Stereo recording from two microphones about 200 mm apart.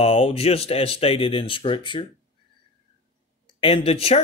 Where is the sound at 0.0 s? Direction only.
30° left (ahead or behind).